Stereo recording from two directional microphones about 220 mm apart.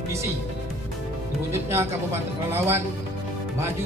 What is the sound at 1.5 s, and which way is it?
Speech, 10° right (ahead or behind).